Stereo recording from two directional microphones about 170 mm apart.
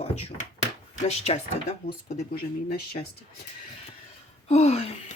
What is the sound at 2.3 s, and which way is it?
Speech, 60° left (ahead or behind).